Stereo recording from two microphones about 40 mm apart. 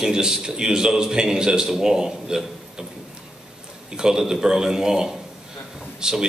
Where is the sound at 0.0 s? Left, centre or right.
Centre.